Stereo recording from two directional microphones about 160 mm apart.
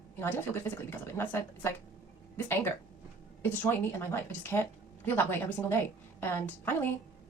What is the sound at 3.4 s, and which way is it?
A woman's voice, 15° left (ahead or behind).